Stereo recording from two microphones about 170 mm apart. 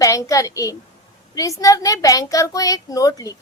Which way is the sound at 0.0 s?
20° left (ahead or behind).